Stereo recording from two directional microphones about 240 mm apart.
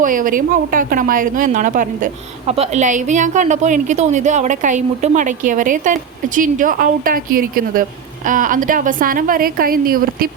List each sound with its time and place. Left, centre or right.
0.0 s a woman's voice: right